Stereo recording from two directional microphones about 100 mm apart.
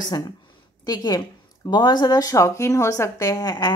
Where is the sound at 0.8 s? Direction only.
40° left (ahead or behind).